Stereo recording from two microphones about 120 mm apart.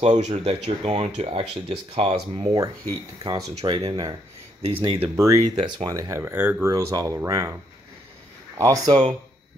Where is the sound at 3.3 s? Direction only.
30° right (ahead or behind).